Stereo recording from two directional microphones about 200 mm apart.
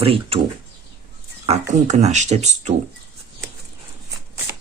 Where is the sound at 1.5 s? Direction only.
35° right (ahead or behind).